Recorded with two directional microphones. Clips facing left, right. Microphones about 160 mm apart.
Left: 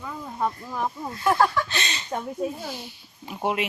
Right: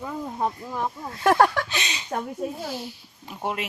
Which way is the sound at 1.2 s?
75° right (ahead or behind).